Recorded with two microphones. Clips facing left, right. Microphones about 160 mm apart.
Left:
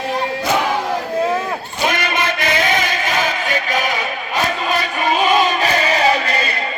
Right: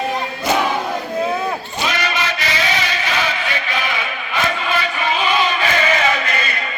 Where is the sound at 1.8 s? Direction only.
50° left (ahead or behind); by 6.5 s 35° left (ahead or behind).